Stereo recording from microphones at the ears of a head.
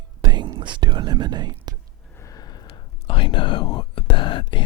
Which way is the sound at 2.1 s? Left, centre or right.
Left.